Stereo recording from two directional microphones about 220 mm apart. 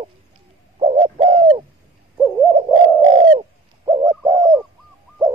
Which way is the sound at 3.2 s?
30° right (ahead or behind).